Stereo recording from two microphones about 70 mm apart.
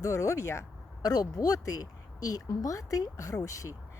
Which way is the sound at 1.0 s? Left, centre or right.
Left.